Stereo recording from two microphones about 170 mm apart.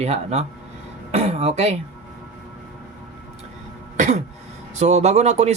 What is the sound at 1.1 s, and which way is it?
Cough, 35° right (ahead or behind).